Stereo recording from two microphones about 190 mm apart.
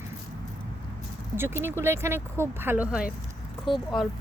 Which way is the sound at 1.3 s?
10° right (ahead or behind).